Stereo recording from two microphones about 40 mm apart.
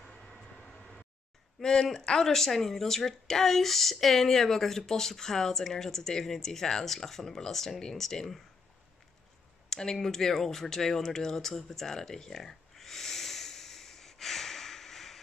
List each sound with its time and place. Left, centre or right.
0.0 s vehicle: centre
1.6 s speech: centre
9.7 s a sound: centre